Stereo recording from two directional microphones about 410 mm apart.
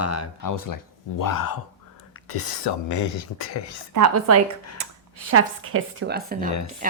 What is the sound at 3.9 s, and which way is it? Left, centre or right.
A woman's voice, right.